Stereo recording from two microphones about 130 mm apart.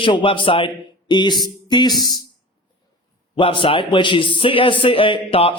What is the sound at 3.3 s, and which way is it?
A man's voice, 40° left (ahead or behind).